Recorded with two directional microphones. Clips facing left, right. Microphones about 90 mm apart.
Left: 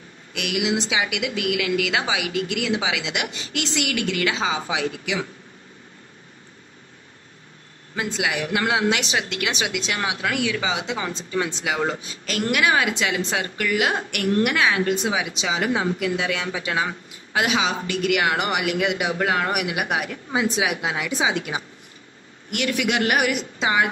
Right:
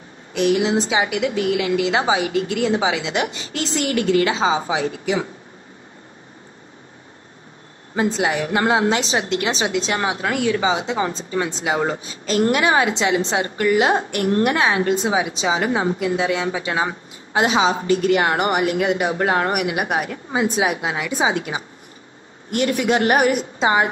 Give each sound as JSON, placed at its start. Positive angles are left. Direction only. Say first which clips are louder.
{"t": 0.3, "sound": "a woman's voice", "louder": "right 7 dB", "side_deg": -35}
{"t": 7.9, "sound": "a woman's voice", "louder": "right 6 dB", "side_deg": -30}